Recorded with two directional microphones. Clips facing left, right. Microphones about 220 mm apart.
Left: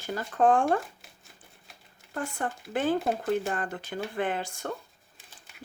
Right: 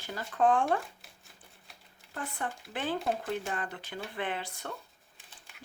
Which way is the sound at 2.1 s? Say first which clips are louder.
Left 5 dB; 45° left (ahead or behind).